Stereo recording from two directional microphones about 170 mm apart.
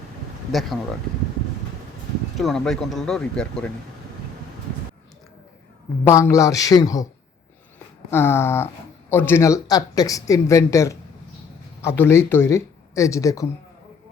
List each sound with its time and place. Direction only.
2.4 s speech: centre (ahead or behind)
6.1 s speech: 15° left (ahead or behind)
8.1 s speech: 15° left (ahead or behind)